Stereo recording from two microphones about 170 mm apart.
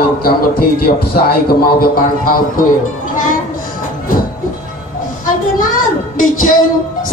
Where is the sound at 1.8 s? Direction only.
55° left (ahead or behind).